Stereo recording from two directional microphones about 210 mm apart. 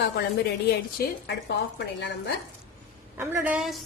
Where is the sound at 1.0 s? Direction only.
45° left (ahead or behind).